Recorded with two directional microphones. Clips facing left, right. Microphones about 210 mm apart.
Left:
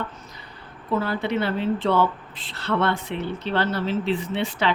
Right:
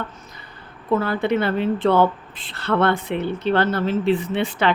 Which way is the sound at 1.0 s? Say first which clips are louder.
Right 4 dB; 55° right (ahead or behind).